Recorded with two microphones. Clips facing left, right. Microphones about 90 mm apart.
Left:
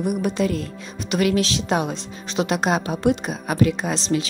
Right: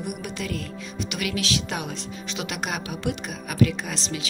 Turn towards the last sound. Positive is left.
turn(degrees=35)  # may be behind; listen again after turning